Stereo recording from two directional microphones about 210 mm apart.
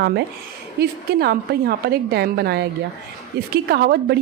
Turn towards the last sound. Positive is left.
turn(degrees=-50)  # may be behind; listen again after turning